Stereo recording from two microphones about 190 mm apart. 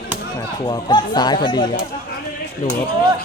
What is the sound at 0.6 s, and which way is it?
Speech, 20° left (ahead or behind).